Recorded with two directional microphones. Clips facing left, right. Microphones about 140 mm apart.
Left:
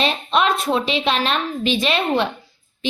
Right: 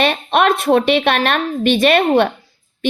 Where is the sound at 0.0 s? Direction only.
60° right (ahead or behind).